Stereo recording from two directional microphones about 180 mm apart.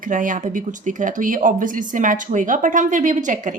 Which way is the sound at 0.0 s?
45° right (ahead or behind).